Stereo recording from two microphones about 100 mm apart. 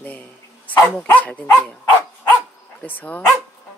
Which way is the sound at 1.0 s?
15° left (ahead or behind).